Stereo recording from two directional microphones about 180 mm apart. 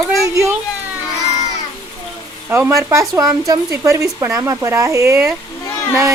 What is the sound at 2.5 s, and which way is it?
Speech, 15° right (ahead or behind).